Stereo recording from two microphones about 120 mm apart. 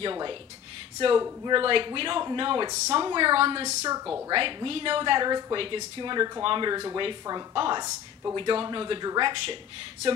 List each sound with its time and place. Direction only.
0.0 s speech: 45° right (ahead or behind)
1.5 s speech: 45° right (ahead or behind)
3.8 s a woman's voice: 30° right (ahead or behind)
4.3 s speech: 45° right (ahead or behind)
7.8 s speech: 25° right (ahead or behind)
8.4 s speech: 45° right (ahead or behind)